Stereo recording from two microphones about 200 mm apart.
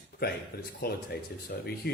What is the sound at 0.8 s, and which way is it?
Speech, 50° left (ahead or behind).